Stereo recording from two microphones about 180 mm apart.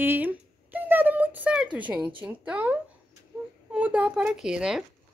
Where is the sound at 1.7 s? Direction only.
5° right (ahead or behind).